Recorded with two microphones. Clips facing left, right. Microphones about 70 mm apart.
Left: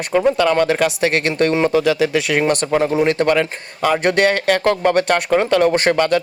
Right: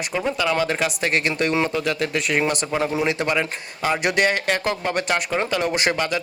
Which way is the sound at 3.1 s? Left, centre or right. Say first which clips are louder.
Left 6 dB; left.